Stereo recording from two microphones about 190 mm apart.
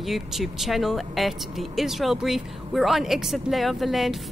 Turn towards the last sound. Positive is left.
turn(degrees=0)  # may be behind; listen again after turning